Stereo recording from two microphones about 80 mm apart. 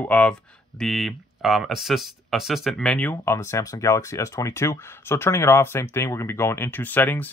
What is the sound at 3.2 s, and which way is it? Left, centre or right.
Speech, left.